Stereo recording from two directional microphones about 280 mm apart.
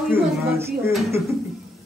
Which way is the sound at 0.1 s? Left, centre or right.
Centre.